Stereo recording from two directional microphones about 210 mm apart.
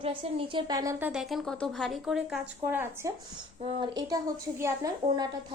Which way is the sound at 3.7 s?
20° right (ahead or behind).